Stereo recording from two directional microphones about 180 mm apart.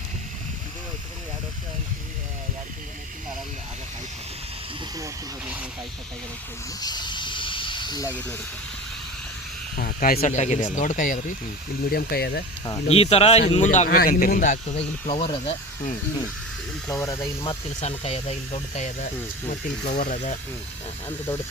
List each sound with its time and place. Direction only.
6.7 s snake: 20° left (ahead or behind)
9.7 s speech: 55° left (ahead or behind)
10.2 s speech: 40° left (ahead or behind)
11.9 s speech: 60° left (ahead or behind)
12.9 s speech: 35° left (ahead or behind)
16.9 s speech: 15° left (ahead or behind)
17.7 s speech: 35° left (ahead or behind)
19.9 s speech: 50° left (ahead or behind)